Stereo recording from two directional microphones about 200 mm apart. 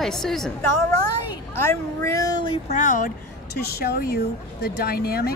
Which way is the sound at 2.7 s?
40° left (ahead or behind).